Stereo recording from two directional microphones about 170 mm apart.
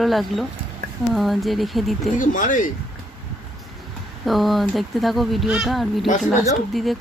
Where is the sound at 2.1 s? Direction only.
50° left (ahead or behind).